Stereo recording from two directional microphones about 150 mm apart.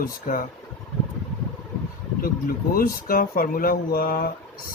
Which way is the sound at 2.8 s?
75° left (ahead or behind).